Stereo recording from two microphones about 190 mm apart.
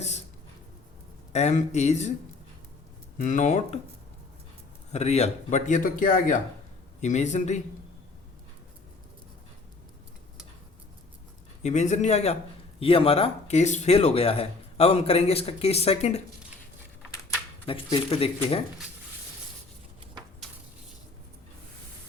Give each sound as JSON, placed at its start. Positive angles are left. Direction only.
{"t": 0.0, "sound": "writing", "side_deg": 35}
{"t": 1.3, "sound": "speech", "side_deg": 35}
{"t": 3.2, "sound": "speech", "side_deg": 40}
{"t": 4.9, "sound": "speech", "side_deg": 35}
{"t": 11.6, "sound": "speech", "side_deg": 40}
{"t": 17.7, "sound": "speech", "side_deg": 25}